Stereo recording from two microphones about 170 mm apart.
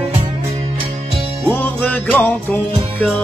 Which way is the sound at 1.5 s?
10° left (ahead or behind).